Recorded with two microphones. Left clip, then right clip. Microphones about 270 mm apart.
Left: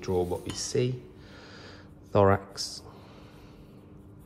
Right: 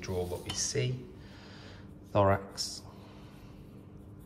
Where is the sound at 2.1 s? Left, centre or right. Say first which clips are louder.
Left 4 dB; left.